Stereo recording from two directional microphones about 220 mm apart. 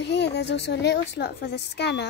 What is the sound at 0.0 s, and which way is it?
A woman's voice, 50° left (ahead or behind).